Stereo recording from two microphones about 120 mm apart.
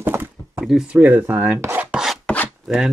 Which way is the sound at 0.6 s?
Centre (ahead or behind).